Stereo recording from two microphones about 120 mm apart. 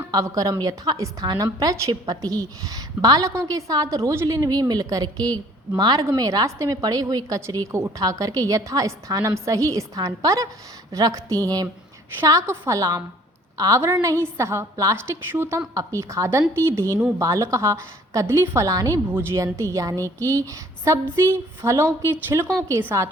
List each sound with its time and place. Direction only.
0.1 s a woman's voice: 30° right (ahead or behind)